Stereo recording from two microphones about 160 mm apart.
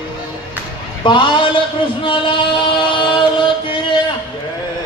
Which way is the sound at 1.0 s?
30° left (ahead or behind).